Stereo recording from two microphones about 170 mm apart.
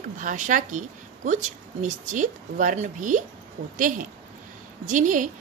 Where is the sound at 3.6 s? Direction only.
60° right (ahead or behind).